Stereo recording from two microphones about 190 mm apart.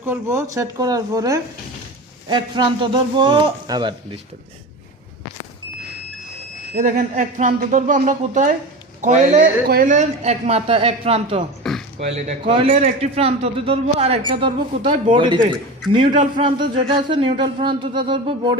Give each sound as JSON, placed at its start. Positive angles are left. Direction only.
{"t": 0.0, "sound": "a man's voice", "side_deg": -10}
{"t": 6.7, "sound": "a man's voice", "side_deg": -45}